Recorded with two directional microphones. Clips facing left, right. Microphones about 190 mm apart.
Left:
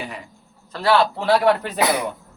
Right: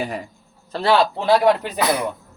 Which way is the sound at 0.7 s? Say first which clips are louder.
Right 1 dB; 25° right (ahead or behind).